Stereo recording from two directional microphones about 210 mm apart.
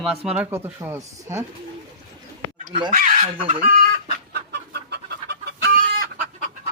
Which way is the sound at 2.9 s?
35° right (ahead or behind).